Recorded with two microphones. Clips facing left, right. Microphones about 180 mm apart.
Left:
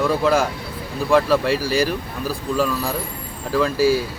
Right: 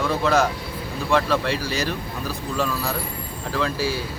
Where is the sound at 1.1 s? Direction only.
5° left (ahead or behind).